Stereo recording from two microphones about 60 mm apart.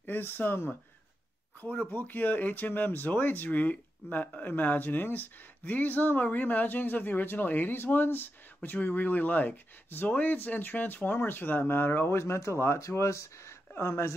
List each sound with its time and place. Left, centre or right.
0.0 s speech: left